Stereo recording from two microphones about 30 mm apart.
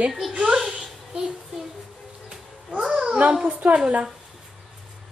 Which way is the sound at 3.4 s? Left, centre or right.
Right.